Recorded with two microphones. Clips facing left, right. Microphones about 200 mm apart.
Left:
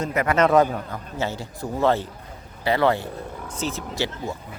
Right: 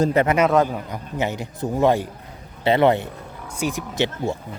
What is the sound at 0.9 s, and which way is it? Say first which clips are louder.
A man's voice: right 3 dB; 15° right (ahead or behind).